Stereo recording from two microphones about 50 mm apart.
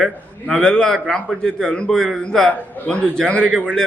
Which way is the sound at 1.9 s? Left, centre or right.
Centre.